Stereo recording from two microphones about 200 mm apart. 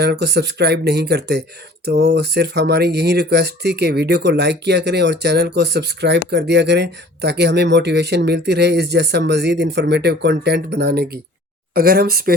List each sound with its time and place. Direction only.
0.0 s speech: 55° right (ahead or behind)